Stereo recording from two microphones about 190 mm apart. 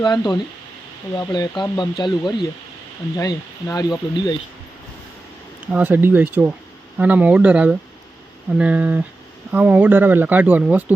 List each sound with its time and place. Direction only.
0.0 s speech: 20° left (ahead or behind)
5.7 s speech: 10° right (ahead or behind)